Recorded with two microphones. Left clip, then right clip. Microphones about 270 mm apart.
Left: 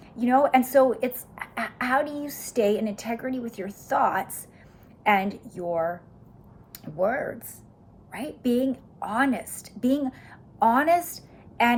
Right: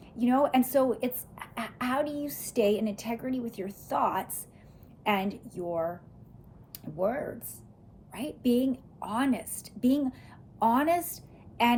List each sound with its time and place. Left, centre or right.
0.2 s a woman's voice: centre